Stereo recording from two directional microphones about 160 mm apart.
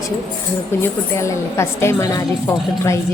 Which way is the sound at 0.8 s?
15° left (ahead or behind).